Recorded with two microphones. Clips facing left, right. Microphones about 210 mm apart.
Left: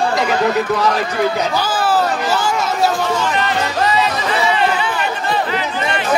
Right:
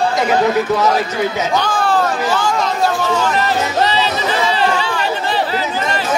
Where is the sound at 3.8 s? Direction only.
30° right (ahead or behind).